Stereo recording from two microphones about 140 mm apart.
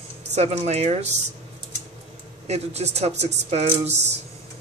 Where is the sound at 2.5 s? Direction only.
50° right (ahead or behind).